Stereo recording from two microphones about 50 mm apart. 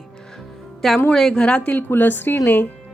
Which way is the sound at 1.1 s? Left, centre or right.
Centre.